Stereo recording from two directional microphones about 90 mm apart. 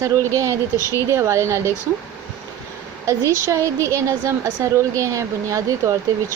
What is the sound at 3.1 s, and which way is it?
A woman's voice, 35° right (ahead or behind).